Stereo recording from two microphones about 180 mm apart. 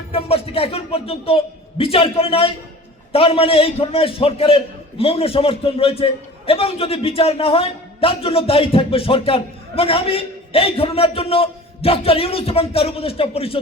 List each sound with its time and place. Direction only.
0.1 s a man's voice: 30° left (ahead or behind)